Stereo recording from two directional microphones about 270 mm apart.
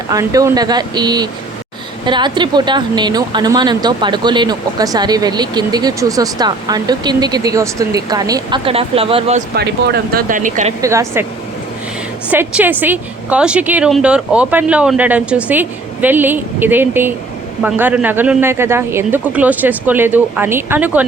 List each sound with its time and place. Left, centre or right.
0.1 s speech: centre
9.6 s speech: right
10.8 s speech: centre
12.3 s a woman's voice: centre